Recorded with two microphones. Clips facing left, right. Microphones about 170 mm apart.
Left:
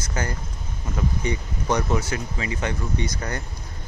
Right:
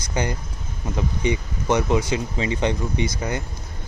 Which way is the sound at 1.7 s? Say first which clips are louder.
Right 4 dB; 15° right (ahead or behind).